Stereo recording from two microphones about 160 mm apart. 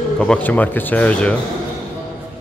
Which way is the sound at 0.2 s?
10° left (ahead or behind).